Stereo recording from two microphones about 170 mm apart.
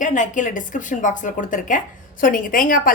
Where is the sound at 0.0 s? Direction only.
50° left (ahead or behind).